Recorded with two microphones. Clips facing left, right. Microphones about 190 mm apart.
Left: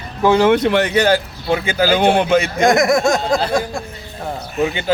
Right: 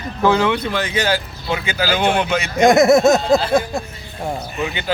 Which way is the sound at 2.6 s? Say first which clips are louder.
Right 6 dB; 20° right (ahead or behind).